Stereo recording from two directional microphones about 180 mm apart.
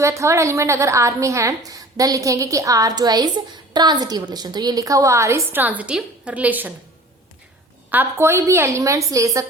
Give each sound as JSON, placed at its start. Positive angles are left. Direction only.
{"t": 0.0, "sound": "a woman's voice", "side_deg": -15}
{"t": 7.9, "sound": "a woman's voice", "side_deg": -10}